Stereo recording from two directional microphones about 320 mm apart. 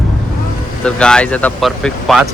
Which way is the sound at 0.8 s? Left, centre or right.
Centre.